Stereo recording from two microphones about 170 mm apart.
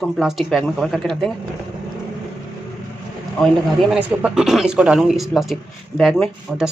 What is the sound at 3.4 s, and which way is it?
Speech, centre (ahead or behind).